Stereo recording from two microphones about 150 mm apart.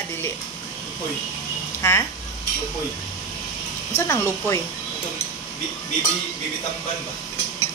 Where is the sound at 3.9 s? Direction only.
20° left (ahead or behind).